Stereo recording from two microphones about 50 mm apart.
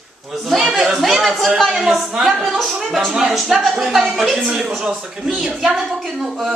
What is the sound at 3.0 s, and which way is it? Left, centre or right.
A woman's voice, centre.